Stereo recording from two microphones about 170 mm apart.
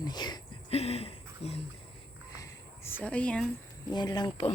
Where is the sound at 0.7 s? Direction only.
40° left (ahead or behind).